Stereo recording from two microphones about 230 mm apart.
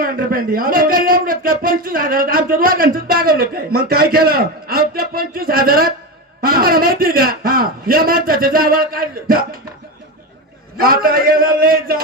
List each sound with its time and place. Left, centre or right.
0.0 s speech: right
10.8 s speech: right